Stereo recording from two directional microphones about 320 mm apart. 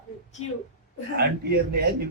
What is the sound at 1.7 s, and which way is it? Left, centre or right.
Speech, right.